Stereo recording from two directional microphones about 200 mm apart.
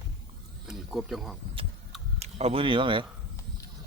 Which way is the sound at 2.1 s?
30° right (ahead or behind).